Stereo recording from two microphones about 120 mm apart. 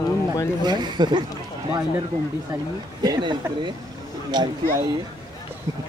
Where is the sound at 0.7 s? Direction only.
35° right (ahead or behind).